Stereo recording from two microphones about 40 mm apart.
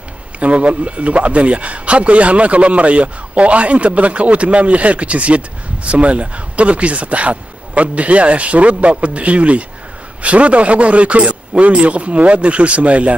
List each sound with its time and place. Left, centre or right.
0.4 s a man's voice: right